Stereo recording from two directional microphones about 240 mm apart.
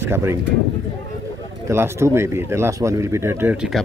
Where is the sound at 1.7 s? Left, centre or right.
Centre.